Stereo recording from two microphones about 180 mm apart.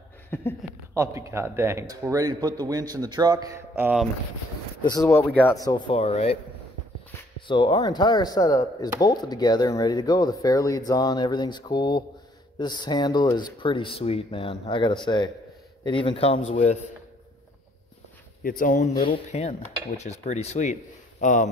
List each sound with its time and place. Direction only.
0.3 s speech: 10° left (ahead or behind)
0.9 s a man's voice: 15° right (ahead or behind)
4.8 s speech: 20° left (ahead or behind)
5.9 s a man's voice: 35° left (ahead or behind)
7.4 s a man's voice: 25° left (ahead or behind)
18.4 s speech: 50° left (ahead or behind)
19.0 s a man's voice: 35° left (ahead or behind)